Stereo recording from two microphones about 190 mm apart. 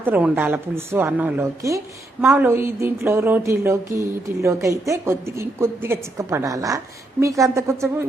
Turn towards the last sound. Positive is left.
turn(degrees=-15)  # may be behind; listen again after turning